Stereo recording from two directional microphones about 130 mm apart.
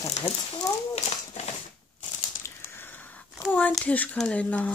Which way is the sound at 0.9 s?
55° left (ahead or behind).